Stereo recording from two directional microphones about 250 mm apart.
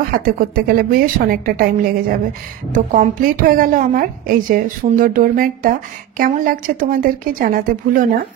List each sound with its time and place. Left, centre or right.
0.1 s a woman's voice: right